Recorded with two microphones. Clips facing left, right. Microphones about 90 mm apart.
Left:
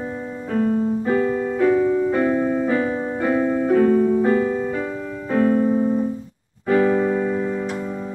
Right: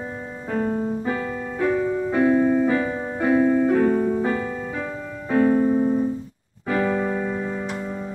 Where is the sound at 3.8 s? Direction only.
15° right (ahead or behind).